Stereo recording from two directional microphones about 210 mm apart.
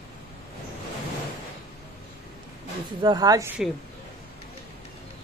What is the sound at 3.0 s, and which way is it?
Speech, 20° right (ahead or behind).